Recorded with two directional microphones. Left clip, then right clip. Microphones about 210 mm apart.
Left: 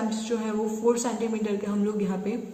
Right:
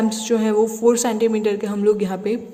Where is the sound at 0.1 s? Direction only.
55° right (ahead or behind).